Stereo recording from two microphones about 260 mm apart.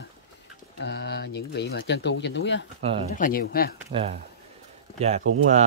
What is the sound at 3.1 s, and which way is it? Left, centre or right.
Speech, left.